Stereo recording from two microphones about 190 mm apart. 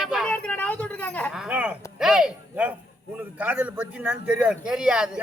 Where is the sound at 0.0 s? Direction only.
Centre (ahead or behind).